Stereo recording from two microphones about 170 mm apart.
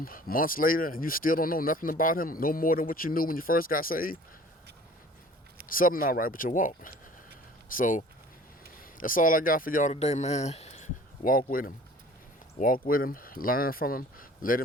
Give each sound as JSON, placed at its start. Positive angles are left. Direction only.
{"t": 0.0, "sound": "speech", "side_deg": 55}
{"t": 5.6, "sound": "speech", "side_deg": 55}